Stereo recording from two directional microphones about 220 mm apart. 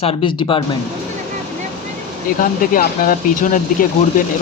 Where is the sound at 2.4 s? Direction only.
40° left (ahead or behind).